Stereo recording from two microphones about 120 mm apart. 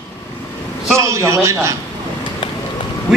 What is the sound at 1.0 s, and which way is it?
Speech, 25° right (ahead or behind).